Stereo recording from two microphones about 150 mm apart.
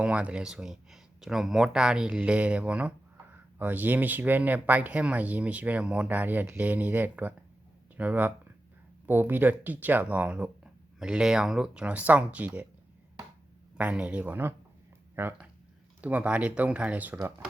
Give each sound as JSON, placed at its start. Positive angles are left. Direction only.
{"t": 0.0, "sound": "speech", "side_deg": -10}
{"t": 13.7, "sound": "speech", "side_deg": -10}